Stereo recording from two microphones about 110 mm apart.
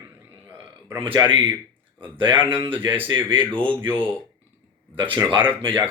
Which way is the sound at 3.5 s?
50° right (ahead or behind).